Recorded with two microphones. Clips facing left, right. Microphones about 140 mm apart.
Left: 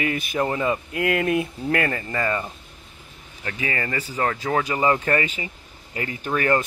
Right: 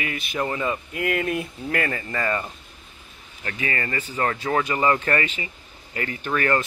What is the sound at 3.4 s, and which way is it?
Speech, 20° left (ahead or behind).